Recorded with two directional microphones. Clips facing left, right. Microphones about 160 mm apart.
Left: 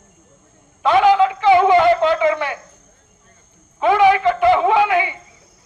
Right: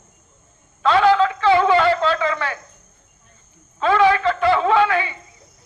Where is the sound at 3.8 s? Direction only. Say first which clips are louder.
Left 3 dB; 15° left (ahead or behind).